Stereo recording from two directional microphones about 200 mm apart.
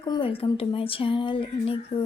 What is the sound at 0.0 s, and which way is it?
Speech, 25° left (ahead or behind).